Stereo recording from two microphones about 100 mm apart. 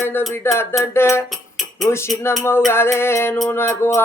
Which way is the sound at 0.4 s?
20° left (ahead or behind).